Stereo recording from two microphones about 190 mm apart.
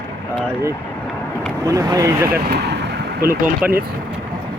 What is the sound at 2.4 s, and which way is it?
Vehicle, 60° right (ahead or behind).